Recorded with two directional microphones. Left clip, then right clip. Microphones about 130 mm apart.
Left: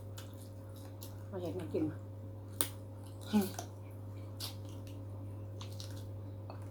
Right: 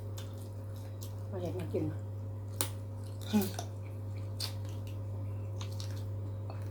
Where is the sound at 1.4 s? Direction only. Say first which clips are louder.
Right 1 dB; 25° left (ahead or behind).